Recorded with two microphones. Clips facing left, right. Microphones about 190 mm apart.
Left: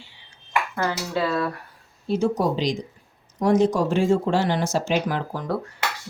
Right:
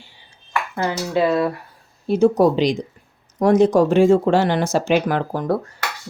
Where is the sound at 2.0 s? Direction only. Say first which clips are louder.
Right 7 dB; 60° right (ahead or behind).